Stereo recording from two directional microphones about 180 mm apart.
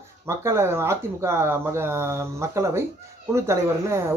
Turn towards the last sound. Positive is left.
turn(degrees=-15)  # may be behind; listen again after turning